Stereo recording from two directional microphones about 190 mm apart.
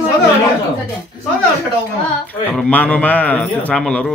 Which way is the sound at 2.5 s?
5° left (ahead or behind).